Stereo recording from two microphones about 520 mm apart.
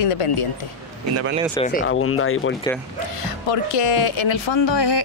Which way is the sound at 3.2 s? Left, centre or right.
Left.